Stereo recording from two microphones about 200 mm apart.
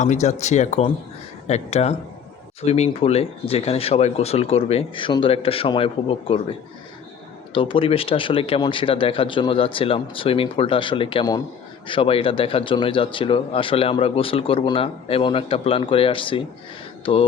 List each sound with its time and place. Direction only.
0.0 s speech: 35° left (ahead or behind)
7.5 s speech: 25° left (ahead or behind)